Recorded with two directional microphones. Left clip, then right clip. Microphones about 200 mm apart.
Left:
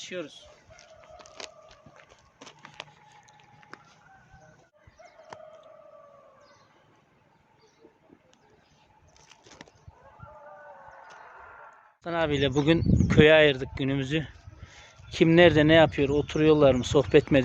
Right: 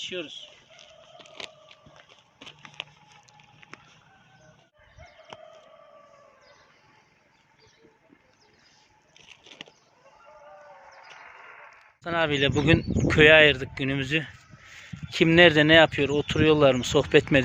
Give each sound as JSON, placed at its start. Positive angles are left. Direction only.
{"t": 0.0, "sound": "chicken", "side_deg": 30}
{"t": 1.3, "sound": "biting", "side_deg": 0}
{"t": 3.6, "sound": "chicken", "side_deg": 30}
{"t": 9.1, "sound": "a sound", "side_deg": 0}
{"t": 10.8, "sound": "a sound", "side_deg": 25}
{"t": 12.0, "sound": "speech", "side_deg": 0}